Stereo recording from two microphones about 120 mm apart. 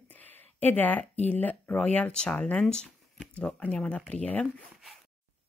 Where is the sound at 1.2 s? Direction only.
15° left (ahead or behind).